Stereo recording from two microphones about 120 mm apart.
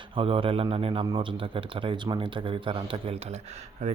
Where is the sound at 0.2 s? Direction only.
50° right (ahead or behind).